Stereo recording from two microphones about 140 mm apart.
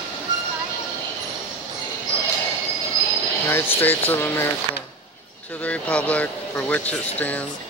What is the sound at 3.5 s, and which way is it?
Speech, 15° left (ahead or behind).